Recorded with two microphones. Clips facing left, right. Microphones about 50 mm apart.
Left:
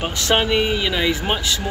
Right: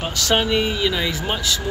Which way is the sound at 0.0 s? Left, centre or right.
Left.